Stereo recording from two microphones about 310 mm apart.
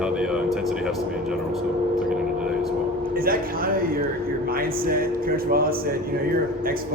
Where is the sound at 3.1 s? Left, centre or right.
Right.